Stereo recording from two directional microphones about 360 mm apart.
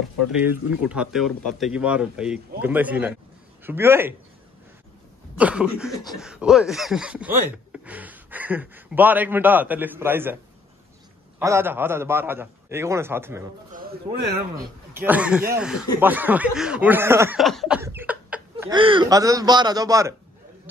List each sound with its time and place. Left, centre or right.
0.3 s speech: centre
5.4 s speech: centre
13.7 s speech: right
15.0 s speech: centre